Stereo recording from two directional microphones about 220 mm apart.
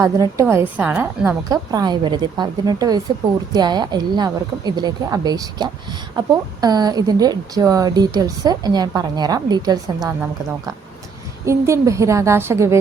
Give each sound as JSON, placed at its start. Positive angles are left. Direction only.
{"t": 0.0, "sound": "a woman's voice", "side_deg": -15}
{"t": 11.4, "sound": "a woman's voice", "side_deg": -15}